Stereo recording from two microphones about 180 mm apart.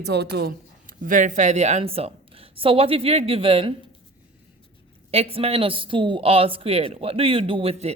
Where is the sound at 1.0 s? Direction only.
45° right (ahead or behind); by 3.7 s 30° right (ahead or behind).